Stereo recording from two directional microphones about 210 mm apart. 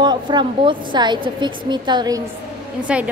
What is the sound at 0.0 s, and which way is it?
A woman's voice, 20° right (ahead or behind).